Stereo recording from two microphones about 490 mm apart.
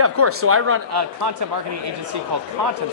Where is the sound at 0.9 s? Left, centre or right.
Right.